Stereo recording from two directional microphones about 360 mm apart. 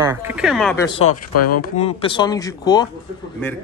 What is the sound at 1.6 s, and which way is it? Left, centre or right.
A man's voice, centre.